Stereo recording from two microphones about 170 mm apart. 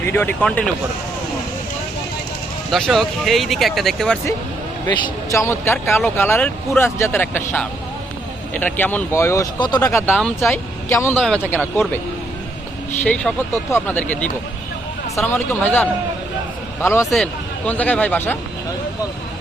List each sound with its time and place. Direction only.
0.0 s speech: 10° left (ahead or behind)
2.6 s speech: centre (ahead or behind)
4.9 s speech: 25° left (ahead or behind)
13.3 s speech: centre (ahead or behind)
13.7 s speech: 15° left (ahead or behind)